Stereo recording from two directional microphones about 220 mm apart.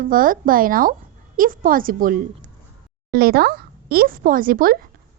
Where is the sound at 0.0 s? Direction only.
40° right (ahead or behind).